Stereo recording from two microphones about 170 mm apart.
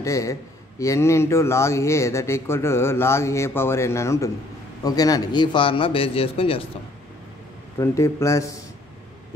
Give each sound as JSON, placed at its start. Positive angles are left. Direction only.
{"t": 0.0, "sound": "a man's voice", "side_deg": 20}
{"t": 7.8, "sound": "a man's voice", "side_deg": 15}